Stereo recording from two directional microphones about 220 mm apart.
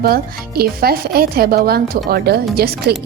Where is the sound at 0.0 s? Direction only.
45° right (ahead or behind).